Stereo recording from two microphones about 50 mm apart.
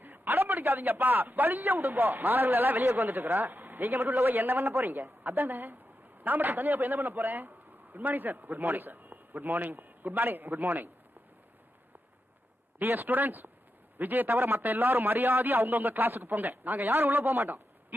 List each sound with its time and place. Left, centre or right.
0.0 s a man's voice: right
12.8 s a man's voice: right